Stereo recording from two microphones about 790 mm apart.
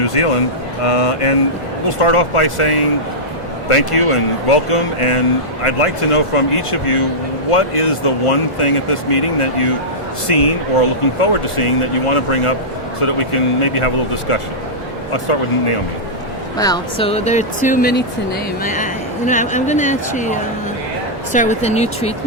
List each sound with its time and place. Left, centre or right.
0.0 s speech: left
16.6 s speech: centre